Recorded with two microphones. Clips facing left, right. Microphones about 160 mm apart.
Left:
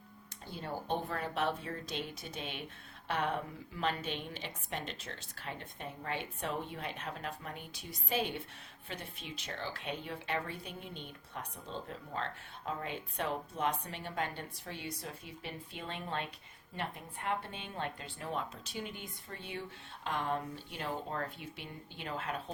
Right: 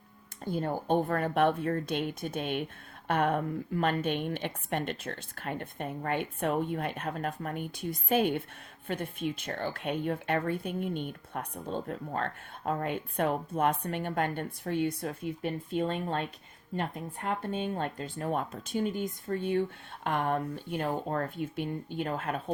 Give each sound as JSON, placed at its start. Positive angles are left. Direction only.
{"t": 0.4, "sound": "speech", "side_deg": -50}